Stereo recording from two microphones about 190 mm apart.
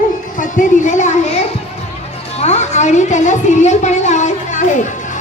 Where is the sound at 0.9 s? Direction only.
40° left (ahead or behind).